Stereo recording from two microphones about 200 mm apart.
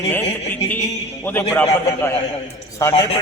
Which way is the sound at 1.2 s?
10° left (ahead or behind).